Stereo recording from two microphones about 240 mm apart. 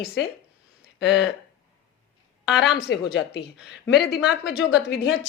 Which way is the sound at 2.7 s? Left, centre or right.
Left.